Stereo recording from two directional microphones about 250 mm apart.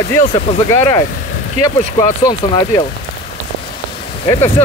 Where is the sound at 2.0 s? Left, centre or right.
Centre.